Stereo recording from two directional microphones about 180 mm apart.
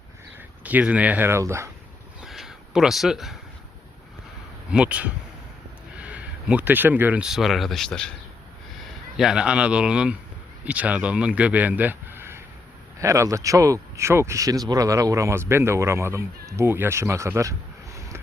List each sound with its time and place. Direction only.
0.6 s speech: 10° right (ahead or behind)
2.2 s a sound: centre (ahead or behind)
4.7 s speech: 5° right (ahead or behind)